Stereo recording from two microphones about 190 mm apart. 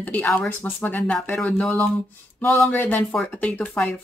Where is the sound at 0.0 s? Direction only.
10° left (ahead or behind).